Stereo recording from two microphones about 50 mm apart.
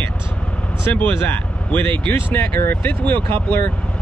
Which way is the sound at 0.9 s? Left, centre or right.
Left.